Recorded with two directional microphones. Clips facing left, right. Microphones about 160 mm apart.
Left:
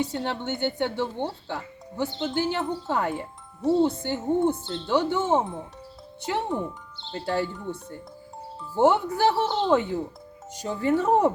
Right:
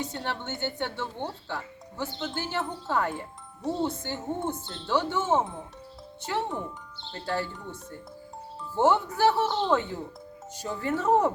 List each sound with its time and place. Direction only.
0.0 s speech: 15° left (ahead or behind)